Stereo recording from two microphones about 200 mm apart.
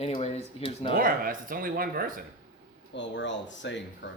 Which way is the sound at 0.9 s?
45° right (ahead or behind).